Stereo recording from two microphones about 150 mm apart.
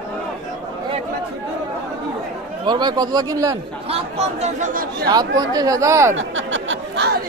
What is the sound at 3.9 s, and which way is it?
Speech, 45° right (ahead or behind).